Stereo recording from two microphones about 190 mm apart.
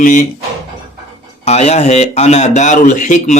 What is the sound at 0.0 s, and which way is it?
Speech, 40° left (ahead or behind).